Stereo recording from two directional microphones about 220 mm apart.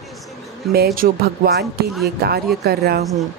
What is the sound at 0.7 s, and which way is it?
Speech, 45° right (ahead or behind).